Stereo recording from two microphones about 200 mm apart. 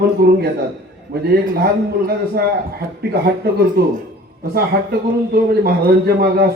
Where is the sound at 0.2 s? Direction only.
55° right (ahead or behind).